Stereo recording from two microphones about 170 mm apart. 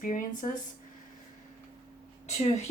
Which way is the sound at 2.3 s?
40° left (ahead or behind).